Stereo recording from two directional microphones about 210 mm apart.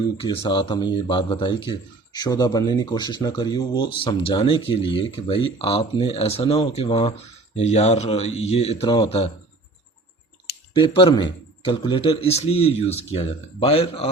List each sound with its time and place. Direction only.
0.2 s a man's voice: 20° left (ahead or behind)
10.8 s a man's voice: 25° left (ahead or behind)